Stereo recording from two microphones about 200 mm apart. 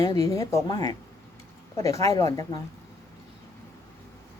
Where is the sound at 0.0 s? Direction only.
15° left (ahead or behind).